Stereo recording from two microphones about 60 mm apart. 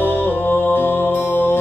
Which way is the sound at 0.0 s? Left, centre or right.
Left.